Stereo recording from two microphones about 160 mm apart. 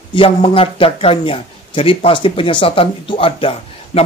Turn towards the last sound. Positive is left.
turn(degrees=35)  # may be behind; listen again after turning